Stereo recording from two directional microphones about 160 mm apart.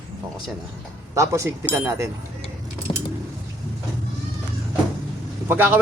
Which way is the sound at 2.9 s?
30° left (ahead or behind).